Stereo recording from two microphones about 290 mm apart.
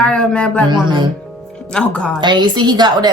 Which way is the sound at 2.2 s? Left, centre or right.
Centre.